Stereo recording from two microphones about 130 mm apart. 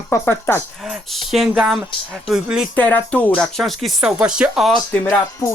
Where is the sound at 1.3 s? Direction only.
Centre (ahead or behind).